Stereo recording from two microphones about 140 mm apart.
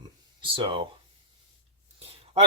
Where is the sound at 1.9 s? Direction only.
45° right (ahead or behind).